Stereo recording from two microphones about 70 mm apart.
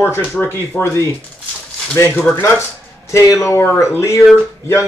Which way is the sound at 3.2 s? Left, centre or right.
Left.